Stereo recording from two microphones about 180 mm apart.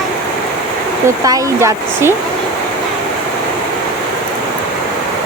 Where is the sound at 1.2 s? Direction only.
20° right (ahead or behind).